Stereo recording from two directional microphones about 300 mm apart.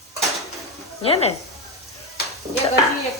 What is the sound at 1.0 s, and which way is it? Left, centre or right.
Speech, centre.